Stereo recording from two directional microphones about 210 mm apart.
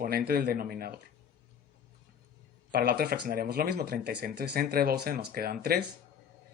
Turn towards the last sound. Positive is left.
turn(degrees=-50)  # may be behind; listen again after turning